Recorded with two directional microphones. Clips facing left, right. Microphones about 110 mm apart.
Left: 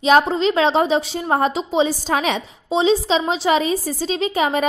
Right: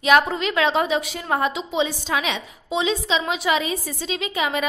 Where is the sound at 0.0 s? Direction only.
30° left (ahead or behind).